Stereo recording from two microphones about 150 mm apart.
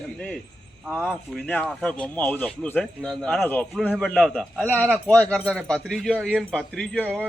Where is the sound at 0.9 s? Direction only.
Centre (ahead or behind).